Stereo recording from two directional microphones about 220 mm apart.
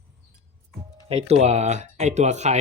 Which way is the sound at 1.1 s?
25° right (ahead or behind).